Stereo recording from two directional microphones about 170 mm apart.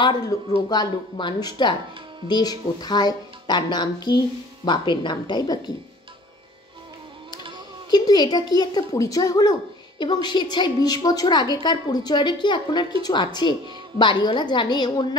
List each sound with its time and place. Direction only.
0.0 s speech: 25° left (ahead or behind)
7.9 s speech: 25° left (ahead or behind)